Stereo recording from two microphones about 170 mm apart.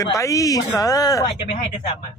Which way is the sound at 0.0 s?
20° left (ahead or behind).